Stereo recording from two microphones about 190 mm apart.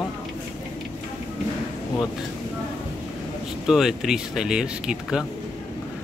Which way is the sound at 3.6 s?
Centre (ahead or behind).